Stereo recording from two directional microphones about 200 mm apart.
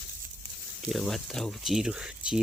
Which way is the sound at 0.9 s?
Centre (ahead or behind).